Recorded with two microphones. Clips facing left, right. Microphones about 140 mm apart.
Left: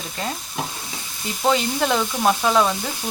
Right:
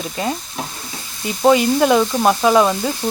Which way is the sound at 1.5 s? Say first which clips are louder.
Right 7 dB; 10° right (ahead or behind).